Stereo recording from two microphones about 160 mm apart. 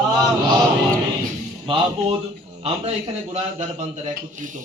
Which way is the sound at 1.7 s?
35° right (ahead or behind).